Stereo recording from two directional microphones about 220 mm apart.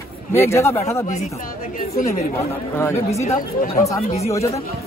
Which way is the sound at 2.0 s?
10° left (ahead or behind).